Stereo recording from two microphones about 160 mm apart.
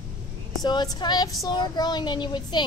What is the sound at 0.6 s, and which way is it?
A woman's voice, 25° left (ahead or behind).